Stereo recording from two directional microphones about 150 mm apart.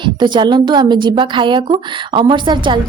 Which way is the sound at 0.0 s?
30° right (ahead or behind).